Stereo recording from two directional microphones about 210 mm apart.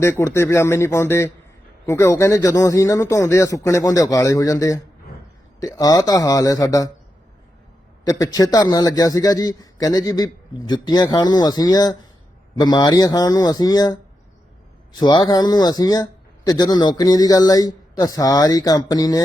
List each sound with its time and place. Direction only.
0.0 s a man's voice: 10° left (ahead or behind)
8.0 s a man's voice: 15° left (ahead or behind)
14.9 s a man's voice: 20° left (ahead or behind)